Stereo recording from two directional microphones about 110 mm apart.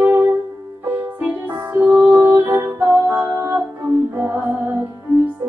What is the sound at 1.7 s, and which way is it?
Music, 15° right (ahead or behind).